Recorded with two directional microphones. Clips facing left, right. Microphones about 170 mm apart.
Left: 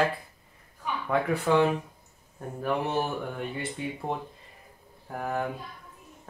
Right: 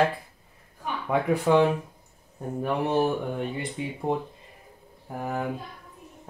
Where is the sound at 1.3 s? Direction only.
15° right (ahead or behind).